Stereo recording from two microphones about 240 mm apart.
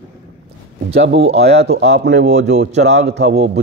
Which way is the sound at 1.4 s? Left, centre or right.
Right.